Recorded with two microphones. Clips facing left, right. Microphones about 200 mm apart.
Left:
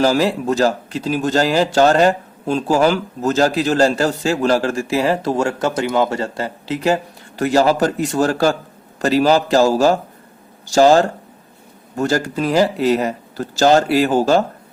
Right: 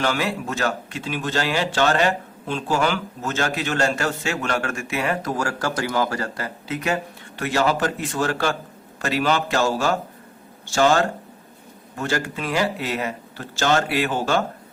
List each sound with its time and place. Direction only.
0.0 s a man's voice: 35° left (ahead or behind)